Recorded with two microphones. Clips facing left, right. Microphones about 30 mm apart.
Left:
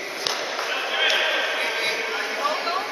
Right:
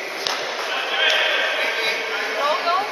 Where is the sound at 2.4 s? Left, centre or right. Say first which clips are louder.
Right 6 dB; right.